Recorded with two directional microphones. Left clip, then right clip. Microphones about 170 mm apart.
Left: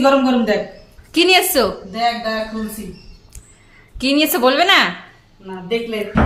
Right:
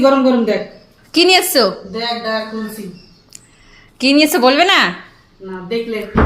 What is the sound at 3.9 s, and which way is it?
Speech, 15° right (ahead or behind).